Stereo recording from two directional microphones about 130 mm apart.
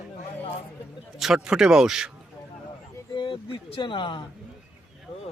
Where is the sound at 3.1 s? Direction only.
40° left (ahead or behind).